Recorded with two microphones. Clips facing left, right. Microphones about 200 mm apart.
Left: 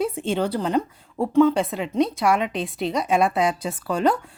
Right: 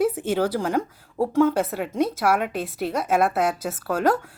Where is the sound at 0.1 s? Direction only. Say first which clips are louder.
Right 1 dB; 10° right (ahead or behind).